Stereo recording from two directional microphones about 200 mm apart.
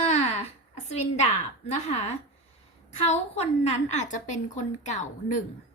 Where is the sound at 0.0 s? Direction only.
35° left (ahead or behind).